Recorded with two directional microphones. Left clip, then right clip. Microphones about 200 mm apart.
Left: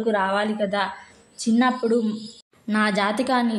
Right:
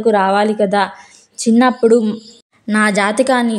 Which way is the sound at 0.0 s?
45° right (ahead or behind).